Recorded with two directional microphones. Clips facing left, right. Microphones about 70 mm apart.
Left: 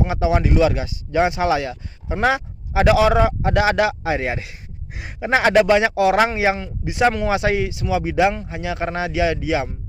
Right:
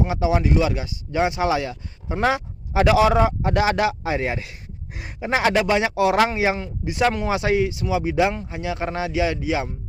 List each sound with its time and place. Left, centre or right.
0.0 s speech: left
7.1 s speech: left
7.3 s speech: left